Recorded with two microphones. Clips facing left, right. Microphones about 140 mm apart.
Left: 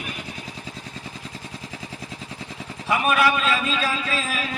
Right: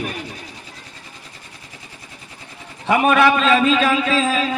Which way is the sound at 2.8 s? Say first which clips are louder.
Right 6 dB; 80° right.